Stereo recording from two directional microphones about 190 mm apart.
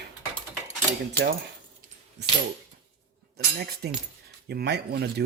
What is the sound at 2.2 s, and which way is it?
Speech, 65° right (ahead or behind).